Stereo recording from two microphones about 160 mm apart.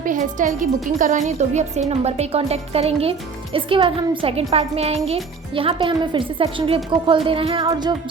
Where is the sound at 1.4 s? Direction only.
45° right (ahead or behind).